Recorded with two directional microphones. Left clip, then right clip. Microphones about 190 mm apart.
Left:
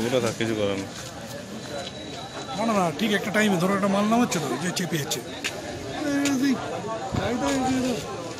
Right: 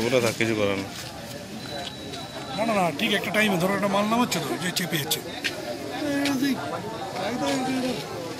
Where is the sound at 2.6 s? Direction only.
50° left (ahead or behind).